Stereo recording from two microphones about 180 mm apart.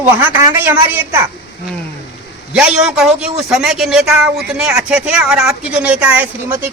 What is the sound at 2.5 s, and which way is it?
A man's voice, 5° right (ahead or behind).